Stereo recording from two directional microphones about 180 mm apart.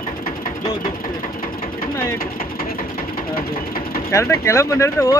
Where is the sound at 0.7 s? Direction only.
50° left (ahead or behind).